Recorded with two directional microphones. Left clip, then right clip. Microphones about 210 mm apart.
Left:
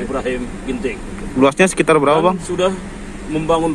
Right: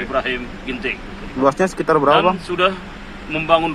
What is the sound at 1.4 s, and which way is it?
Speech, 20° left (ahead or behind).